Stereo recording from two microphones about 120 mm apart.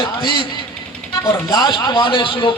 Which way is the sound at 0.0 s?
40° left (ahead or behind).